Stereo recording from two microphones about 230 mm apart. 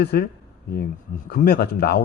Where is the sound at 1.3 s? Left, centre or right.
Left.